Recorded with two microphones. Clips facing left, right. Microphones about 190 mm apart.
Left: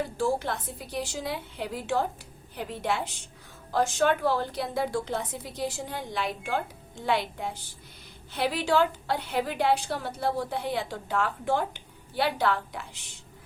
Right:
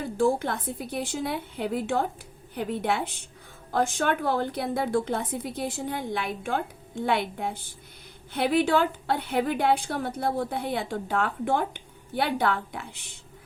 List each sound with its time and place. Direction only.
0.0 s a woman's voice: 55° right (ahead or behind)